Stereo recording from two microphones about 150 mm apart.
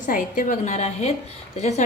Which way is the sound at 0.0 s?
60° left (ahead or behind).